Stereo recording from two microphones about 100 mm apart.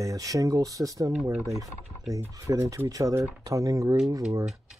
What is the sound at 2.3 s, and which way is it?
Speech, 30° right (ahead or behind).